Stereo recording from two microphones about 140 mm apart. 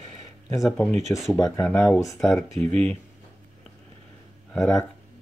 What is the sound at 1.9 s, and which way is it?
Speech, 25° left (ahead or behind).